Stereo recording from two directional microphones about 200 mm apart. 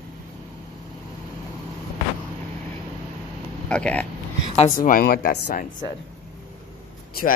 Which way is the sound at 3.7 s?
5° left (ahead or behind).